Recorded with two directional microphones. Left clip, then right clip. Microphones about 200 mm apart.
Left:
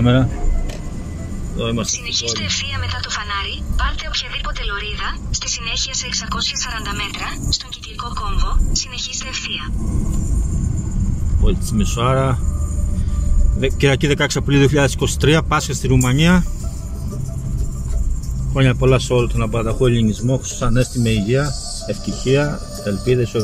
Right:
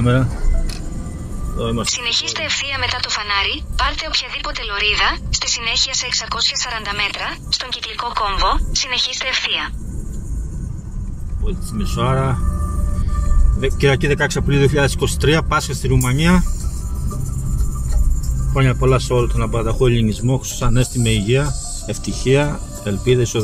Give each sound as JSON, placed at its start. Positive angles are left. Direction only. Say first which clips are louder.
{"t": 0.0, "sound": "speech", "louder": "left 2 dB", "side_deg": 10}
{"t": 1.6, "sound": "speech", "louder": "even", "side_deg": 15}
{"t": 1.9, "sound": "speech", "louder": "right 2 dB", "side_deg": -45}
{"t": 11.4, "sound": "speech", "louder": "left 5 dB", "side_deg": 10}
{"t": 13.6, "sound": "speech", "louder": "even", "side_deg": 10}
{"t": 18.5, "sound": "a man's voice", "louder": "left 1 dB", "side_deg": 10}